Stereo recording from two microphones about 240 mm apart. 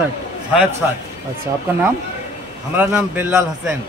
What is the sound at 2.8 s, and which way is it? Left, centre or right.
Speech, centre.